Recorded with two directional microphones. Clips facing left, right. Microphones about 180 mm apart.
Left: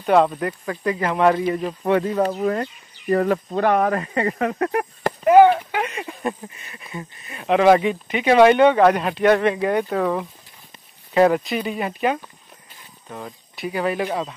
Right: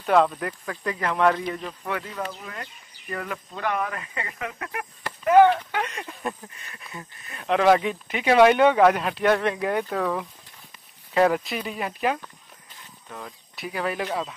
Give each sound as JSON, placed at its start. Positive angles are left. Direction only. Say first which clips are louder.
{"t": 0.0, "sound": "speech", "louder": "left 3 dB", "side_deg": 5}
{"t": 1.6, "sound": "speech", "louder": "left 11 dB", "side_deg": 30}
{"t": 5.3, "sound": "speech", "louder": "left 4 dB", "side_deg": 10}